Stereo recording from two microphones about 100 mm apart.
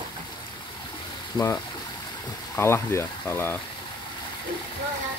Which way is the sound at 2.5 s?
25° left (ahead or behind).